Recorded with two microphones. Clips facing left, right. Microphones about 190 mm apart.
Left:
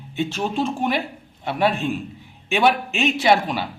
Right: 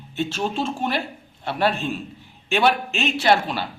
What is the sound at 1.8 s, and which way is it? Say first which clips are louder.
A man's voice: left 3 dB; 15° left (ahead or behind).